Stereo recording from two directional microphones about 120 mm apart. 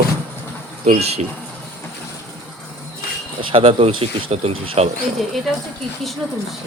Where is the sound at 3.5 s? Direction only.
50° right (ahead or behind).